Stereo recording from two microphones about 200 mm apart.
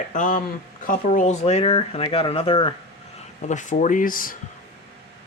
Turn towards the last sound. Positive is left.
turn(degrees=45)  # may be behind; listen again after turning